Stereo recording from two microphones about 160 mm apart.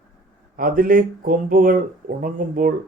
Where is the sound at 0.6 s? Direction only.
60° right (ahead or behind).